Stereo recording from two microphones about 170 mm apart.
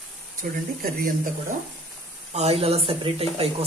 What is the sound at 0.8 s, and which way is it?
Speech, 55° right (ahead or behind).